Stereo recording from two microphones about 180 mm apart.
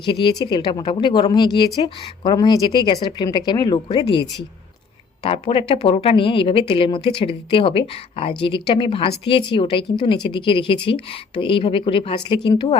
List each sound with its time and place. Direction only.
0.0 s a woman's voice: 25° left (ahead or behind)
5.2 s a woman's voice: 30° left (ahead or behind)